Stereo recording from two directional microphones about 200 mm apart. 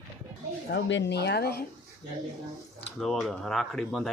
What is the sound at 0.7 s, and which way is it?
Speech, 65° left (ahead or behind).